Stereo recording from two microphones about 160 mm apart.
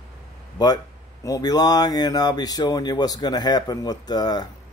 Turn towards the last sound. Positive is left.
turn(degrees=25)  # may be behind; listen again after turning